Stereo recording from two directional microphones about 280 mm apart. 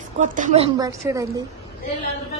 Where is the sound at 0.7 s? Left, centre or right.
Centre.